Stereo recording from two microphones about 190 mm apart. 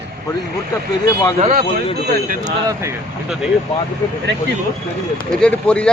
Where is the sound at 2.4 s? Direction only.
20° right (ahead or behind).